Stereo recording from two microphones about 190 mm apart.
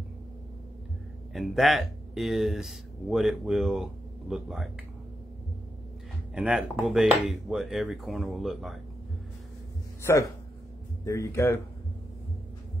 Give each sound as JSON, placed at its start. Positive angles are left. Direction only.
{"t": 1.3, "sound": "speech", "side_deg": 0}
{"t": 6.3, "sound": "speech", "side_deg": -5}
{"t": 10.0, "sound": "speech", "side_deg": 15}